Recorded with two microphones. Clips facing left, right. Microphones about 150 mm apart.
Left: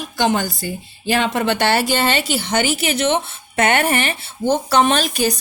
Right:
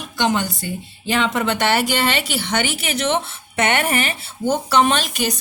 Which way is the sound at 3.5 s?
30° left (ahead or behind).